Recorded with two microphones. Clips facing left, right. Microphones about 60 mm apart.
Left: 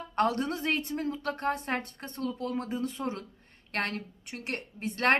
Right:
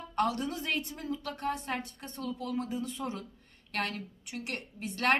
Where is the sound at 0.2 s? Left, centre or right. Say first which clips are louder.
Left 3 dB; left.